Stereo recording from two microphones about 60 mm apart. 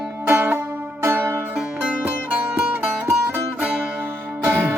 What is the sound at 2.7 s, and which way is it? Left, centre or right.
Music, right.